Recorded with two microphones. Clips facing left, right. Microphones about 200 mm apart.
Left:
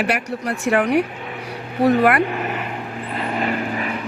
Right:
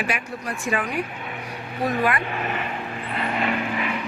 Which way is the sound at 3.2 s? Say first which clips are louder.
Left 2 dB; 35° left (ahead or behind).